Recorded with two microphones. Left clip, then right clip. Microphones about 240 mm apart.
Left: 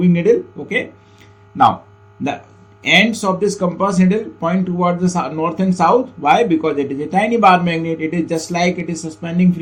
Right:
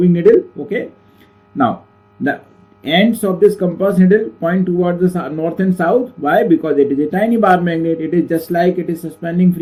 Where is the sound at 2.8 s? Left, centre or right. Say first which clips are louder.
Left 1 dB; left.